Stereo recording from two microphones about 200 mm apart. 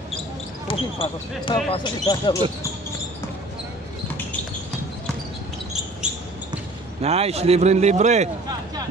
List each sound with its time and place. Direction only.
0.7 s speech: 25° left (ahead or behind)
7.0 s speech: 30° right (ahead or behind)